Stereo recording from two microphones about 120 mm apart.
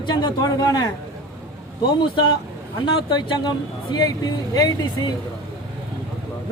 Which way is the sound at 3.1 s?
40° left (ahead or behind).